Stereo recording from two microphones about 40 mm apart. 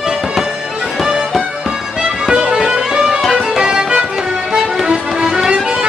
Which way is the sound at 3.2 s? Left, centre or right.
Centre.